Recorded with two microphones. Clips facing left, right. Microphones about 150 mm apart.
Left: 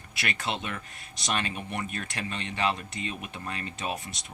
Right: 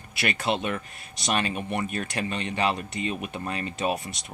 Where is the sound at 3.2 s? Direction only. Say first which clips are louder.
Right 5 dB; 55° right (ahead or behind).